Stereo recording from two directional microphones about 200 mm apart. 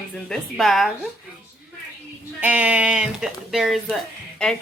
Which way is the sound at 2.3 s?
5° right (ahead or behind).